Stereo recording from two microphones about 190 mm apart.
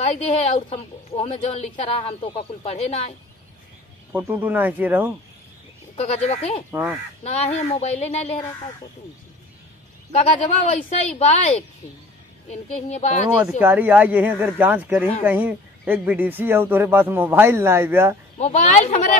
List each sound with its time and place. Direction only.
0.0 s a woman's voice: 35° left (ahead or behind)
4.1 s a man's voice: 10° right (ahead or behind)
5.9 s a woman's voice: 35° left (ahead or behind)
6.7 s a man's voice: 10° right (ahead or behind)
7.2 s a woman's voice: 35° left (ahead or behind)
10.1 s a woman's voice: 35° left (ahead or behind)
13.6 s a man's voice: 10° right (ahead or behind)
18.4 s a woman's voice: 35° left (ahead or behind)